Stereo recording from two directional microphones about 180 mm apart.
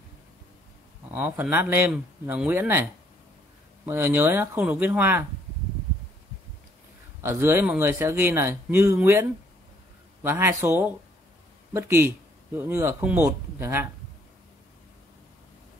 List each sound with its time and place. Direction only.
1.1 s speech: 10° right (ahead or behind)
7.2 s speech: 15° right (ahead or behind)